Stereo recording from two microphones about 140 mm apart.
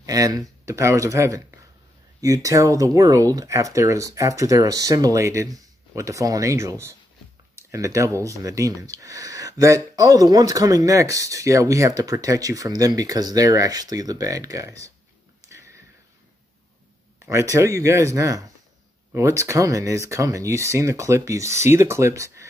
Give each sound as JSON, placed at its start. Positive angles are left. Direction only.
{"t": 0.0, "sound": "speech", "side_deg": -25}
{"t": 15.4, "sound": "a sound", "side_deg": -20}
{"t": 17.3, "sound": "speech", "side_deg": -20}